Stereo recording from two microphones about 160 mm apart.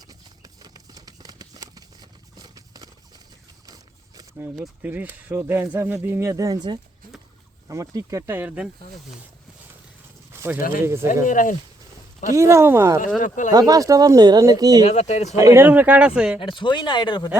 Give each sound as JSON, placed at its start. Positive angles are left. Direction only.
{"t": 0.0, "sound": "a sound", "side_deg": -25}
{"t": 4.5, "sound": "speech", "side_deg": 0}
{"t": 4.9, "sound": "speech", "side_deg": -10}
{"t": 10.3, "sound": "a sound", "side_deg": -15}
{"t": 10.6, "sound": "speech", "side_deg": 65}
{"t": 10.8, "sound": "speech", "side_deg": -15}
{"t": 11.3, "sound": "speech", "side_deg": 55}
{"t": 12.3, "sound": "speech", "side_deg": -15}
{"t": 13.1, "sound": "speech", "side_deg": 50}
{"t": 13.5, "sound": "speech", "side_deg": -25}
{"t": 14.8, "sound": "speech", "side_deg": 45}
{"t": 15.4, "sound": "speech", "side_deg": -15}
{"t": 16.4, "sound": "speech", "side_deg": 30}